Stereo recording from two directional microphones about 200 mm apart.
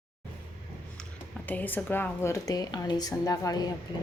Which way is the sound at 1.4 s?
10° left (ahead or behind).